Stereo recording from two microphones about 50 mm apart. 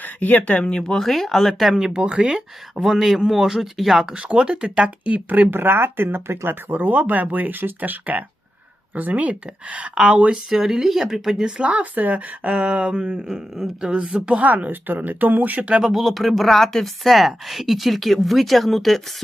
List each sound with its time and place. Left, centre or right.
0.0 s speech: left; by 1.7 s centre
1.7 s speech: centre
2.8 s speech: centre
4.1 s speech: right
5.5 s speech: right
10.5 s speech: centre
11.5 s speech: right
13.2 s speech: centre
14.4 s speech: right
15.8 s speech: centre